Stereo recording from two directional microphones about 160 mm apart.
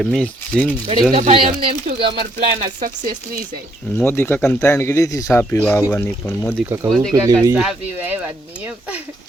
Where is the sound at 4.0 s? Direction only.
15° left (ahead or behind).